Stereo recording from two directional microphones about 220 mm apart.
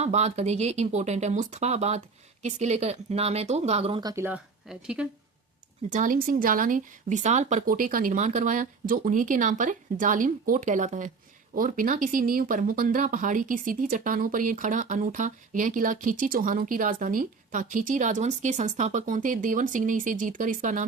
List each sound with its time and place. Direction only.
0.0 s speech: 30° right (ahead or behind); by 5.0 s 5° right (ahead or behind)
5.9 s speech: 35° right (ahead or behind)